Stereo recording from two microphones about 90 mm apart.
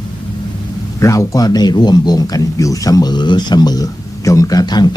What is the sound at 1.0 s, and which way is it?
Speech, 40° left (ahead or behind).